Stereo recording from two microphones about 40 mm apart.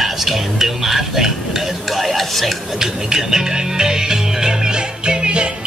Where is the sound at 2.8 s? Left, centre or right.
Centre.